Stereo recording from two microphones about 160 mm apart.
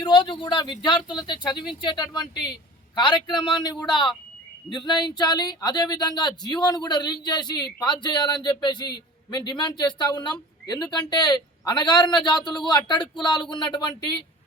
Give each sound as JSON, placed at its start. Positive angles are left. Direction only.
{"t": 0.0, "sound": "speech", "side_deg": 30}